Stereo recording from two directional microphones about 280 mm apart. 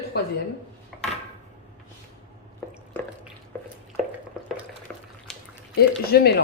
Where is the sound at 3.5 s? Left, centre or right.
Centre.